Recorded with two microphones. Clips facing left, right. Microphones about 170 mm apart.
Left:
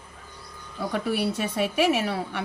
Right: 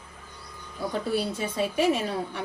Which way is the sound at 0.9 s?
70° left (ahead or behind).